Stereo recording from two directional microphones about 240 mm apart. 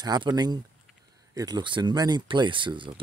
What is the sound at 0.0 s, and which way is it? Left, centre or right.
Speech, centre.